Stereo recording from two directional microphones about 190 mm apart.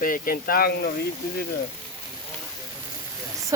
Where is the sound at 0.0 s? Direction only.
50° left (ahead or behind).